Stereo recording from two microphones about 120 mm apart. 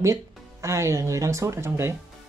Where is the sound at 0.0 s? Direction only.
25° right (ahead or behind).